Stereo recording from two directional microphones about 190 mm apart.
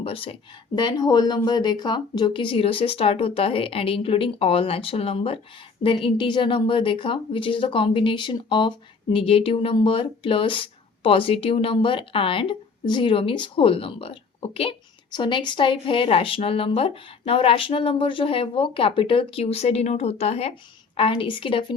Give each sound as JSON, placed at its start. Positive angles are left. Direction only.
{"t": 0.0, "sound": "a woman's voice", "side_deg": 30}